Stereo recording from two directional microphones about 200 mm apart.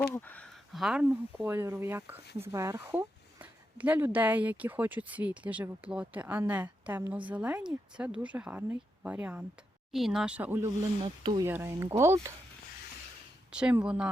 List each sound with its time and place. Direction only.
0.1 s speech: 10° left (ahead or behind); by 10.7 s 10° right (ahead or behind)
11.0 s speech: 25° right (ahead or behind)
13.5 s speech: 5° right (ahead or behind)